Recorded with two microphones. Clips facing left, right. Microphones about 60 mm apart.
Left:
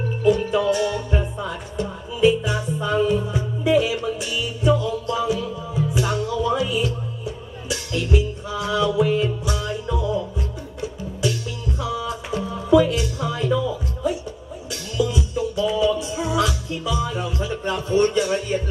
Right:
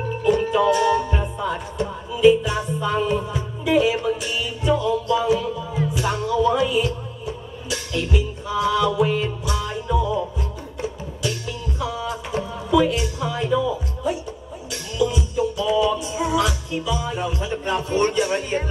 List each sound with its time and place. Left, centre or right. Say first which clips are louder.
0.2 s music: even; right
11.8 s music: even; right